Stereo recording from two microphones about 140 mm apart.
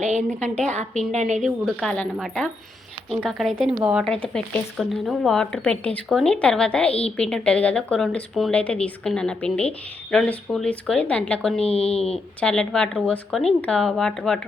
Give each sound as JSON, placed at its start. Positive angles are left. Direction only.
{"t": 0.0, "sound": "a woman's voice", "side_deg": -55}
{"t": 1.6, "sound": "a woman's voice", "side_deg": 5}